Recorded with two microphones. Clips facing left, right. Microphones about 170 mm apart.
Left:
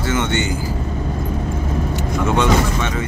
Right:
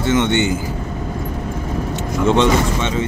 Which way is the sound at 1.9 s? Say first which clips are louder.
Right 4 dB; 25° right (ahead or behind).